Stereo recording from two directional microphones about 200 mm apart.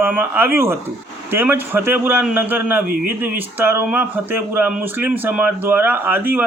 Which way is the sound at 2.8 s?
45° right (ahead or behind).